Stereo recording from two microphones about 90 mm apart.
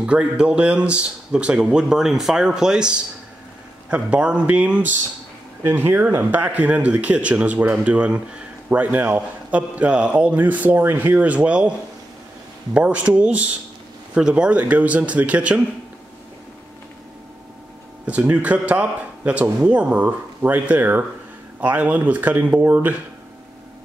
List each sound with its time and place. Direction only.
0.0 s a man's voice: 10° right (ahead or behind)
5.6 s a man's voice: 25° right (ahead or behind)
12.7 s a man's voice: 15° right (ahead or behind)
18.0 s a man's voice: 15° right (ahead or behind)